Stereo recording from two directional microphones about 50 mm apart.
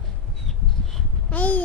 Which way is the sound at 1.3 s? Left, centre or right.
Left.